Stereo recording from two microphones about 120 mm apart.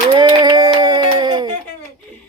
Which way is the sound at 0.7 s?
40° right (ahead or behind).